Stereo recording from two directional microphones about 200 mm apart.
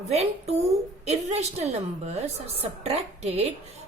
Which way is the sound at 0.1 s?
30° right (ahead or behind).